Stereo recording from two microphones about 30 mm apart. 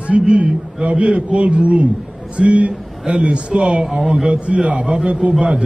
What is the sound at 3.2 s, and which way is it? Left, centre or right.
A man's voice, right.